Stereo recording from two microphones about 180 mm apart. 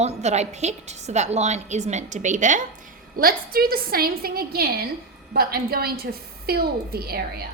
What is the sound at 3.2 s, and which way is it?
A woman's voice, 55° right (ahead or behind).